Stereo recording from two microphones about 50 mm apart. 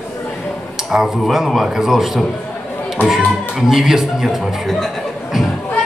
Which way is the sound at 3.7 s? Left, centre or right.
Centre.